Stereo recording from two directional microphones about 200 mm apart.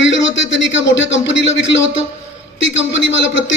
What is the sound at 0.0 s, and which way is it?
A man's voice, 65° left (ahead or behind).